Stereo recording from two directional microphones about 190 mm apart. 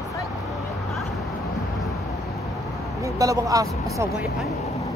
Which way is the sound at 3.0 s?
15° right (ahead or behind).